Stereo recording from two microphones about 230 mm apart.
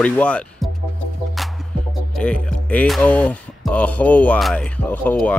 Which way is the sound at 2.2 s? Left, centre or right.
Centre.